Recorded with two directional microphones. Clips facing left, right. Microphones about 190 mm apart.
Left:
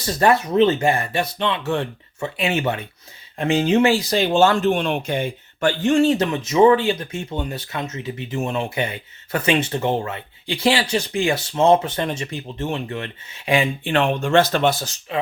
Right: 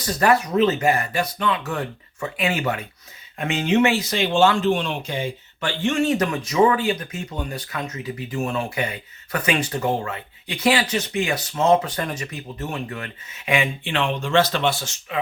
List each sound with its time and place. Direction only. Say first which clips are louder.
0.0 s speech: left 1 dB; 25° left (ahead or behind)
13.9 s speech: left 3 dB; 50° left (ahead or behind)